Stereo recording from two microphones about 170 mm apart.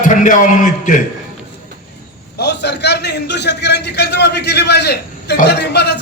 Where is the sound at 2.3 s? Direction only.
75° left (ahead or behind).